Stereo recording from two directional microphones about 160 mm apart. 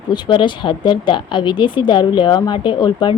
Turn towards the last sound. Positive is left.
turn(degrees=30)  # may be behind; listen again after turning